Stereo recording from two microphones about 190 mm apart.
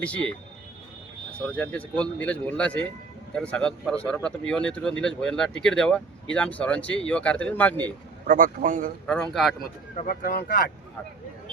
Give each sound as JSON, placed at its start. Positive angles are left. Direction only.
{"t": 0.0, "sound": "speech", "side_deg": 5}
{"t": 8.3, "sound": "speech", "side_deg": -45}
{"t": 9.0, "sound": "speech", "side_deg": 5}
{"t": 10.2, "sound": "speech", "side_deg": 55}